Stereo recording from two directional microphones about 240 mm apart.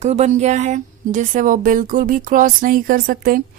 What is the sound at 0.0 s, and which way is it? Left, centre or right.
A woman's voice, right.